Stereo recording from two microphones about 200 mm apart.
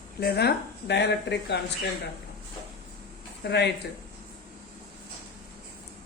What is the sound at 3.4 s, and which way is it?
Speech, 55° left (ahead or behind).